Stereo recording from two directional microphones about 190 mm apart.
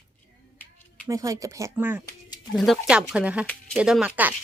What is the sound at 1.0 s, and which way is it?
A woman's voice, 15° right (ahead or behind).